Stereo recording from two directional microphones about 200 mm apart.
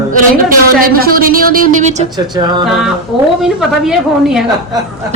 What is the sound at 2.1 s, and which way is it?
Speech, 20° right (ahead or behind).